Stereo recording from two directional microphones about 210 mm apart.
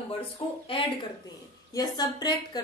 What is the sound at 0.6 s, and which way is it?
A woman's voice, 25° left (ahead or behind).